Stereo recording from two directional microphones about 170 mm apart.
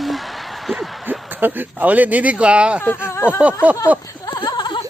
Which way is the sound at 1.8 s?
10° right (ahead or behind).